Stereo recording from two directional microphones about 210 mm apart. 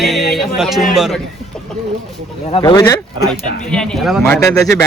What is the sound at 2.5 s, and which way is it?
Speech, 25° left (ahead or behind).